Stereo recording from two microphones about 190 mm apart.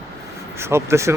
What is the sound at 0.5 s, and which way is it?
Speech, 15° right (ahead or behind).